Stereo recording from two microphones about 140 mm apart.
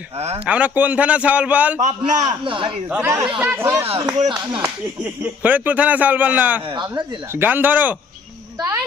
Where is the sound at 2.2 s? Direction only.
35° right (ahead or behind).